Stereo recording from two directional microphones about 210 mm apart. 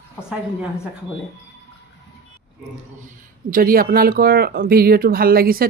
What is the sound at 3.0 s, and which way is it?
Speech, 40° right (ahead or behind).